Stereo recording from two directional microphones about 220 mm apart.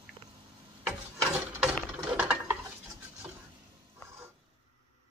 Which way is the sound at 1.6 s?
5° right (ahead or behind).